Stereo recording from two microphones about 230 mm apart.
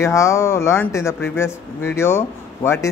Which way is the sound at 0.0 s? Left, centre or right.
Centre.